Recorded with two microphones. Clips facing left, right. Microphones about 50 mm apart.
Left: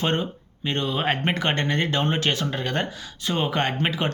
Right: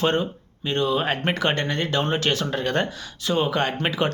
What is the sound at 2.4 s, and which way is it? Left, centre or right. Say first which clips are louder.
Speech: right 2 dB; centre.